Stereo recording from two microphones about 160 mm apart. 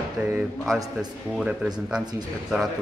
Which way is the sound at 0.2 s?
15° right (ahead or behind).